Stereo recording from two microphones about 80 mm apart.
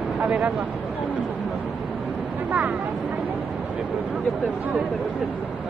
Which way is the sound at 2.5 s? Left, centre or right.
Centre.